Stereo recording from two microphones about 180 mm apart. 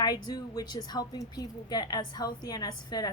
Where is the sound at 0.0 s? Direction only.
20° left (ahead or behind).